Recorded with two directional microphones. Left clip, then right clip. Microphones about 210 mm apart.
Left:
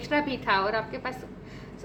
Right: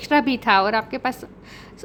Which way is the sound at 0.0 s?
55° right (ahead or behind).